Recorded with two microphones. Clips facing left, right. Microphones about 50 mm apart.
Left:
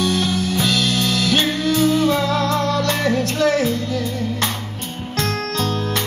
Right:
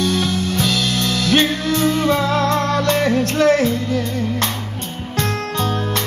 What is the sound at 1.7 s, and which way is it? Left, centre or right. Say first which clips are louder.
Music: even; right.